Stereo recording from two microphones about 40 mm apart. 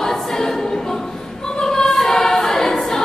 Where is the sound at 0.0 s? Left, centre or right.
Centre.